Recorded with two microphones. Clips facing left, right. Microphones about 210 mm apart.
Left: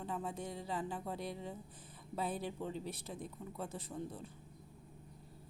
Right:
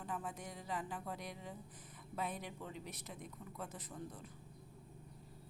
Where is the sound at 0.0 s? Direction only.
25° left (ahead or behind).